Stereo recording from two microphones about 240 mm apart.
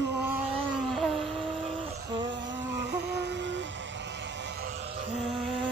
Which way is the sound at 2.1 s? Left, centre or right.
Right.